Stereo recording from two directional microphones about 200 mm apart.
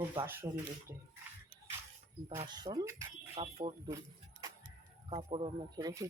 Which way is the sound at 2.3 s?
25° right (ahead or behind).